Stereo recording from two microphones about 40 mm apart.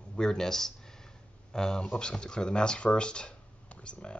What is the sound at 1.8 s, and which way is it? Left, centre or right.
Speech, left.